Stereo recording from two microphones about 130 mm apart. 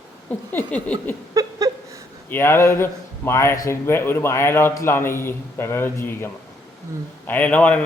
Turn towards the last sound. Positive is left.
turn(degrees=10)  # may be behind; listen again after turning